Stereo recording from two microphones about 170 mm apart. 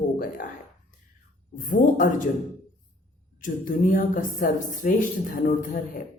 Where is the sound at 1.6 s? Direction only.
55° left (ahead or behind).